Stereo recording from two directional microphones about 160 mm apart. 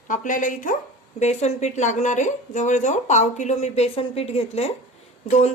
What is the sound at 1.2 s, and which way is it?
Speech, 45° left (ahead or behind).